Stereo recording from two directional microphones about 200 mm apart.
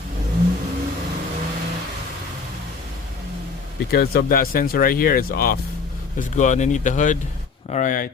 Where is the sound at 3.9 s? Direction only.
50° left (ahead or behind).